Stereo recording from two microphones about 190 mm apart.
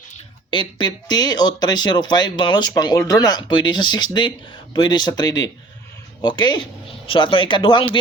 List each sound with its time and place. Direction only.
0.5 s speech: 25° left (ahead or behind)